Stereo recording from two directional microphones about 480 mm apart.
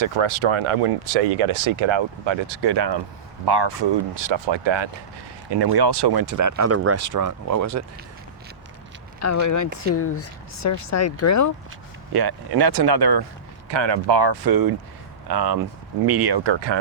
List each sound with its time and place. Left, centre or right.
0.0 s speech: right
5.5 s speech: right
9.2 s speech: left
12.1 s speech: right